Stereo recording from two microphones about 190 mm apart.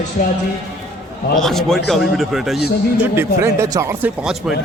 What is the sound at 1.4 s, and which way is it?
A man's voice, centre (ahead or behind).